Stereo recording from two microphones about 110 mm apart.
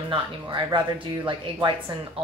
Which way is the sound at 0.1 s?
45° right (ahead or behind).